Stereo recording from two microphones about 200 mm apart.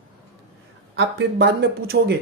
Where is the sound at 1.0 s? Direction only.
60° right (ahead or behind).